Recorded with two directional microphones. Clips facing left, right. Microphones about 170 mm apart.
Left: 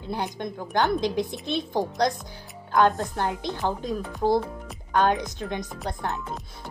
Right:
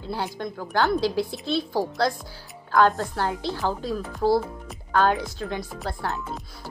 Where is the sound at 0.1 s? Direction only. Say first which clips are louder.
Even; 20° left (ahead or behind).